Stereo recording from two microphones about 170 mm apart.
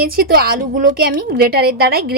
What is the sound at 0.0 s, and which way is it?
A woman's voice, 65° right (ahead or behind).